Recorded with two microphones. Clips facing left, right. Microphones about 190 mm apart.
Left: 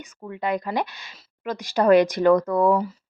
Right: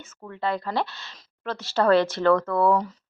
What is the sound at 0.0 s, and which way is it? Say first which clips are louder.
Speech: left 1 dB; 15° left (ahead or behind).